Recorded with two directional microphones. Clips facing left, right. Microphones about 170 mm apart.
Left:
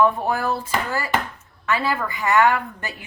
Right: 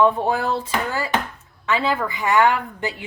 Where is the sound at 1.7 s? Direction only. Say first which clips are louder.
Right 2 dB; 20° right (ahead or behind).